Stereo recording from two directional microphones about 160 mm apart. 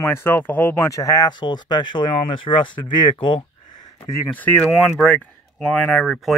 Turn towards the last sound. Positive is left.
turn(degrees=0)  # may be behind; listen again after turning